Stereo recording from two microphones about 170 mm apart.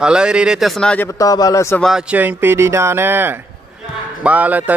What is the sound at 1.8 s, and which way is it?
Speech, 5° right (ahead or behind).